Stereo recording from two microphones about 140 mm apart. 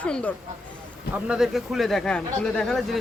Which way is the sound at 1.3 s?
5° right (ahead or behind).